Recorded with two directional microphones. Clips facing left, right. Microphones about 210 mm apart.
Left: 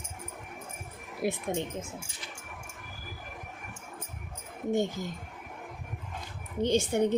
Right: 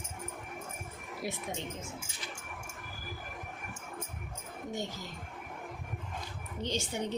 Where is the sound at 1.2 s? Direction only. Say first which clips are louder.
Left 8 dB; 55° left (ahead or behind).